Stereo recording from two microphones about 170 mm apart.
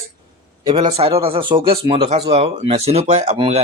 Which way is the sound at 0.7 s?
30° right (ahead or behind).